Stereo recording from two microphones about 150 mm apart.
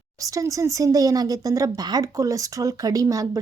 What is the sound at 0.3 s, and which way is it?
Speech, 20° right (ahead or behind).